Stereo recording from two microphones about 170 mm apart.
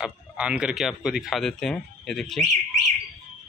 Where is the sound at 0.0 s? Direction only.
5° right (ahead or behind).